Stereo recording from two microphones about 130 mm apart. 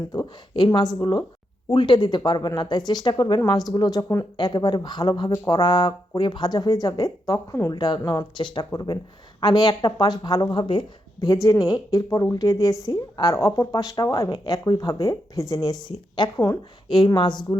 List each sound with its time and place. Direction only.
0.1 s a woman's voice: 30° left (ahead or behind)